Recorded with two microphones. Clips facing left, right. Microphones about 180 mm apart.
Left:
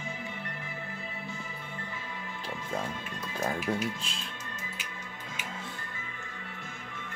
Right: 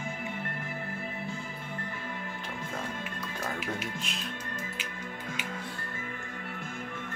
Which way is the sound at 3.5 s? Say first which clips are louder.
Left 4 dB; 30° left (ahead or behind).